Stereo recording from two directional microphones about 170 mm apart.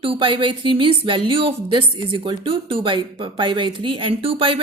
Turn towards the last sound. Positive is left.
turn(degrees=-30)  # may be behind; listen again after turning